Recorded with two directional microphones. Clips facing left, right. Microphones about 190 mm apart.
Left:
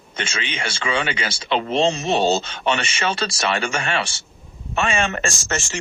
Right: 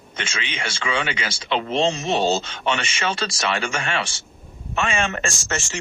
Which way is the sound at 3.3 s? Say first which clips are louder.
Left 2 dB; 30° left (ahead or behind).